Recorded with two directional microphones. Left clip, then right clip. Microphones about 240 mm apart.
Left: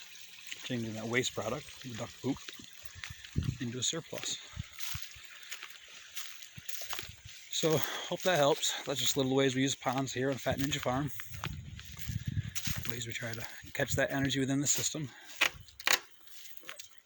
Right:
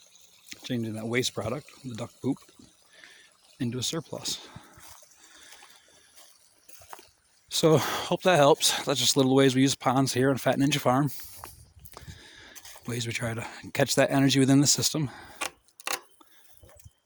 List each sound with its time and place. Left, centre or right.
0.5 s speech: right
3.6 s speech: right
7.6 s speech: right
12.9 s speech: right